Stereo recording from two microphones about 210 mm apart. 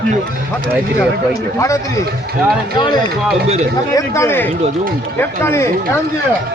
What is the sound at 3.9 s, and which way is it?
A man's voice, 15° left (ahead or behind).